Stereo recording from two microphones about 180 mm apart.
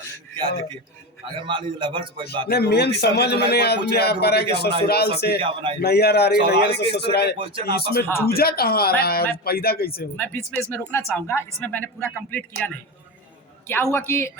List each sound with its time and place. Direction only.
1.4 s a man's voice: 25° right (ahead or behind)
2.5 s a man's voice: 65° left (ahead or behind)
5.4 s a man's voice: 30° right (ahead or behind)
5.8 s a man's voice: 65° left (ahead or behind)
7.3 s a man's voice: 30° right (ahead or behind)
7.7 s a man's voice: 60° left (ahead or behind)
8.0 s speech: 10° left (ahead or behind)
8.3 s a man's voice: 55° left (ahead or behind)
10.2 s speech: 10° left (ahead or behind)